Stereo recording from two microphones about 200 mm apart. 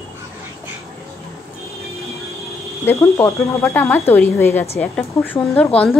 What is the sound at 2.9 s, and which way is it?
Speech, 15° left (ahead or behind).